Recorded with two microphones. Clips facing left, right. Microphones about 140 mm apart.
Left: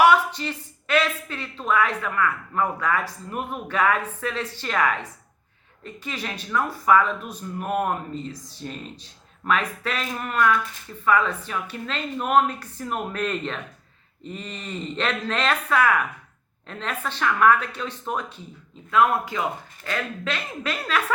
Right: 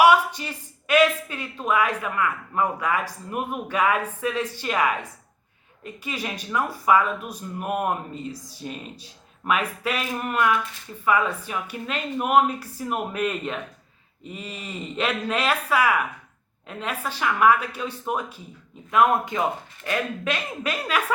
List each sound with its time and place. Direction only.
0.0 s speech: 10° right (ahead or behind)